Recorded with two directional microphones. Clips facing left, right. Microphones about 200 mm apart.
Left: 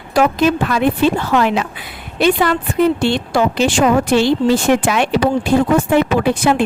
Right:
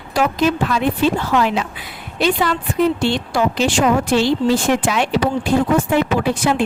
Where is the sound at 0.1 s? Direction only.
55° left (ahead or behind).